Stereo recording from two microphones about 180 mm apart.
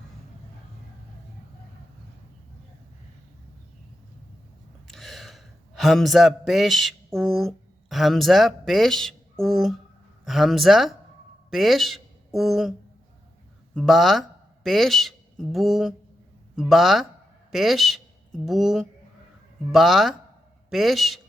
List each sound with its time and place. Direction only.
4.9 s a man's voice: centre (ahead or behind)
13.7 s speech: centre (ahead or behind)